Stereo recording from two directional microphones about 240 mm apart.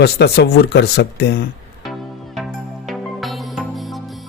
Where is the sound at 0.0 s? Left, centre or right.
Left.